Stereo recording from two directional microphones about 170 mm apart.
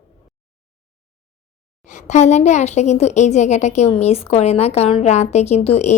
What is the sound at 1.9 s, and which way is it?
A woman's voice, 45° left (ahead or behind).